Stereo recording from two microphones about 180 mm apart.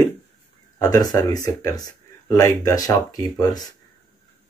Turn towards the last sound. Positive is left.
turn(degrees=20)  # may be behind; listen again after turning